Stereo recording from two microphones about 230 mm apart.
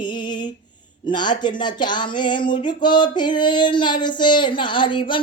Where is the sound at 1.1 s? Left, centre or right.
Centre.